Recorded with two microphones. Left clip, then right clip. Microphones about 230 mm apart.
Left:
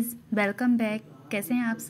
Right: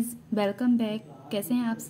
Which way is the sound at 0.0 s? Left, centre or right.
Centre.